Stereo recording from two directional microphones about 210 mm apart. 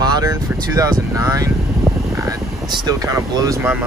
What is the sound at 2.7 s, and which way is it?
Speech, 20° right (ahead or behind).